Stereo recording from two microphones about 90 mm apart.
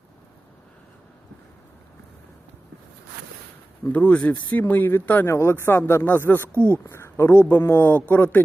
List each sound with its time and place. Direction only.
3.9 s speech: 15° left (ahead or behind)